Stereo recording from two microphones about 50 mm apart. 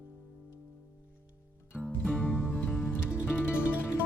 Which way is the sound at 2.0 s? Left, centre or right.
Left.